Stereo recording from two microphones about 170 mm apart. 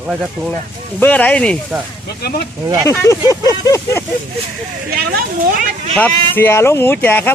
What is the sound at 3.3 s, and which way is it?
Vehicle, 20° left (ahead or behind).